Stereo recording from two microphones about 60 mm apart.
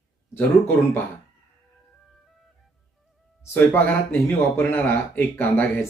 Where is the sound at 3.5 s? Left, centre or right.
Left.